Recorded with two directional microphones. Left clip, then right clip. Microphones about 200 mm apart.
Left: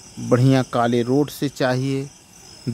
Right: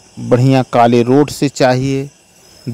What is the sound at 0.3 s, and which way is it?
Speech, 25° right (ahead or behind).